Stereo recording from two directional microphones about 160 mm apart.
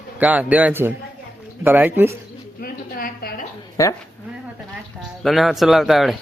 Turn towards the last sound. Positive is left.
turn(degrees=0)  # may be behind; listen again after turning